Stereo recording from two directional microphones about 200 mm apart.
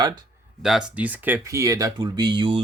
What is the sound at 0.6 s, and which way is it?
Speech, 5° right (ahead or behind).